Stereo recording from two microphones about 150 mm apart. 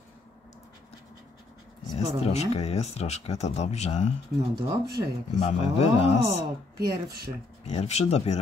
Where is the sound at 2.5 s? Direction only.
45° left (ahead or behind).